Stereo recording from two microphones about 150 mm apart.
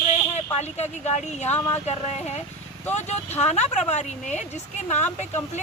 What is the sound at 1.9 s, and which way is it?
A woman's voice, 45° left (ahead or behind).